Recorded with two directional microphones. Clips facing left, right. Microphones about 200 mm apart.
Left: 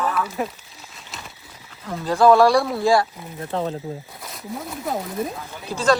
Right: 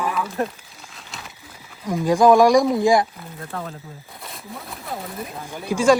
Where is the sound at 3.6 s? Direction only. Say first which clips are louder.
Left 9 dB; 30° left (ahead or behind).